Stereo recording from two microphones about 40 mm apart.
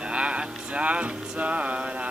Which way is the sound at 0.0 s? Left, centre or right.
Right.